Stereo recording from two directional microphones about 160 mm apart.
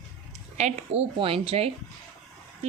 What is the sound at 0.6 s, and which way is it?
A woman's voice, 40° right (ahead or behind).